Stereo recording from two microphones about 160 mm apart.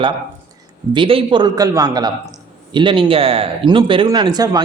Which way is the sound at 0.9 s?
30° right (ahead or behind).